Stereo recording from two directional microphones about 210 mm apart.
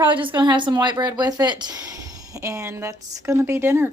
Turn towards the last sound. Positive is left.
turn(degrees=-10)  # may be behind; listen again after turning